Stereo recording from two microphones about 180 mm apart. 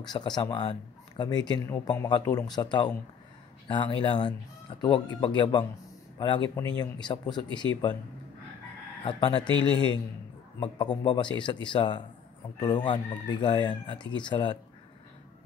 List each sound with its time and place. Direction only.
0.0 s speech: 25° left (ahead or behind)
9.0 s speech: 25° left (ahead or behind)
10.6 s speech: 25° left (ahead or behind)